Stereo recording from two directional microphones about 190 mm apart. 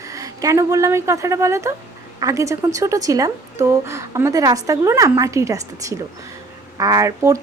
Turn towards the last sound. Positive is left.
turn(degrees=-15)  # may be behind; listen again after turning